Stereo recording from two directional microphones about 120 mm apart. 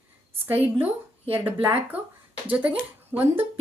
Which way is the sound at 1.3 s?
15° right (ahead or behind).